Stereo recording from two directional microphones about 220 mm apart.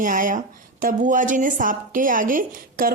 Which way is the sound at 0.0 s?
40° right (ahead or behind).